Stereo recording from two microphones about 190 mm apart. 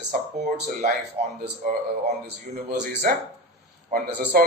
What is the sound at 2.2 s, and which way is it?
Speech, 65° right (ahead or behind).